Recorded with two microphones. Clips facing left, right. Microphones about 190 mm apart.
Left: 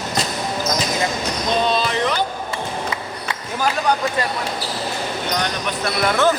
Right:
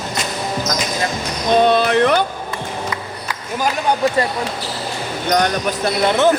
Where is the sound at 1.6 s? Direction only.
60° right (ahead or behind).